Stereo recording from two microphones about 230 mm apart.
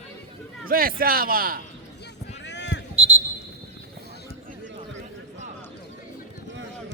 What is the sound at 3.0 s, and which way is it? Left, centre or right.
Basketball bounce, right.